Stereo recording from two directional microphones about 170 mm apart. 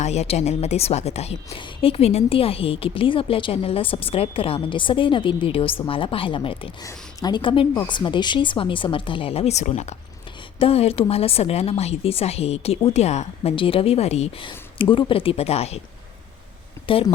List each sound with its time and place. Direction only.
0.0 s a woman's voice: 40° left (ahead or behind)
16.8 s speech: 30° left (ahead or behind)